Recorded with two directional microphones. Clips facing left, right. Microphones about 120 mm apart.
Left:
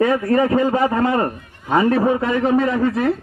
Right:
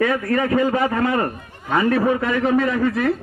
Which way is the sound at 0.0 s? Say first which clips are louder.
Left 3 dB; 25° left (ahead or behind).